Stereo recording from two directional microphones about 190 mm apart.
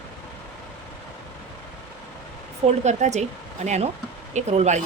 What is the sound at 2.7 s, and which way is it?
Speech, 35° right (ahead or behind).